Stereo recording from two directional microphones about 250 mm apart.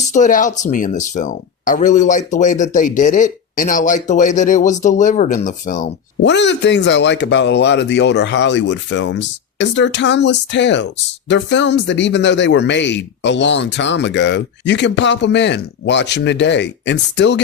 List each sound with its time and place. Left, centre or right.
0.0 s speech: left
6.2 s speech: left